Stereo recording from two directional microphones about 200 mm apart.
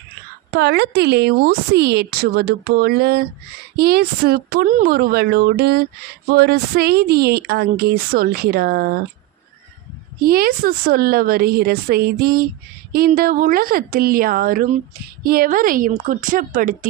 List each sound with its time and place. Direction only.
0.5 s speech: 55° right (ahead or behind)
10.2 s speech: 50° right (ahead or behind)